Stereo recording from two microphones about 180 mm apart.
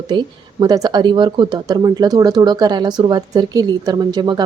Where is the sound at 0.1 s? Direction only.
25° right (ahead or behind).